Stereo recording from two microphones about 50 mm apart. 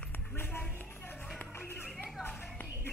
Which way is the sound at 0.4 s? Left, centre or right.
Left.